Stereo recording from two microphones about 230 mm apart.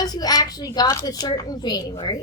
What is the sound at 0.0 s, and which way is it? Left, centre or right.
A woman's voice, centre.